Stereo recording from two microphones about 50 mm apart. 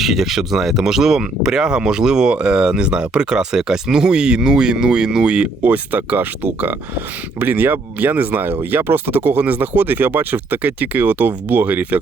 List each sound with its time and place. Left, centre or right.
0.0 s speech: centre
5.6 s speech: right